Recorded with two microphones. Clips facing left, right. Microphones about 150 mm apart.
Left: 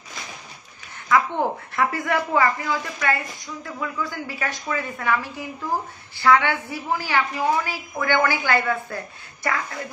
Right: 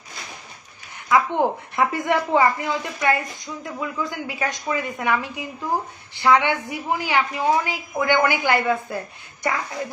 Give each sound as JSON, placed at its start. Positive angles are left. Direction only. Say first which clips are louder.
{"t": 1.0, "sound": "a woman's voice", "louder": "right 2 dB", "side_deg": -15}